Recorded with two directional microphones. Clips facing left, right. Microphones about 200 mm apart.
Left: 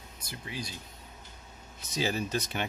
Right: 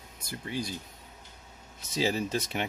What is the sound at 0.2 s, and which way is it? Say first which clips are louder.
Speech: right 5 dB; 50° right (ahead or behind).